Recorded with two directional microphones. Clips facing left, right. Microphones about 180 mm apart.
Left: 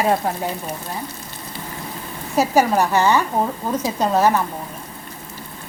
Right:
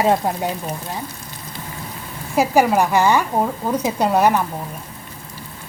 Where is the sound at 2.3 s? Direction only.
10° right (ahead or behind).